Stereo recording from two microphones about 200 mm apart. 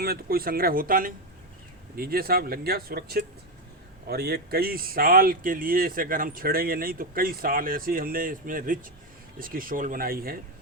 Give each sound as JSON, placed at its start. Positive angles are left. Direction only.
{"t": 0.0, "sound": "speech", "side_deg": -50}